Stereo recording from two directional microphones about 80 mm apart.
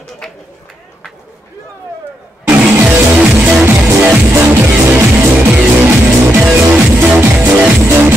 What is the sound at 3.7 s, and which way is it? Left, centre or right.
Music, right.